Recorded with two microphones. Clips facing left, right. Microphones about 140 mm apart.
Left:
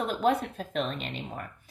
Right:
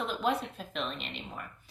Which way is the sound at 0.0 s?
45° left (ahead or behind).